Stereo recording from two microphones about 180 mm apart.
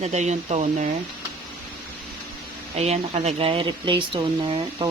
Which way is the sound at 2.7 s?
35° right (ahead or behind).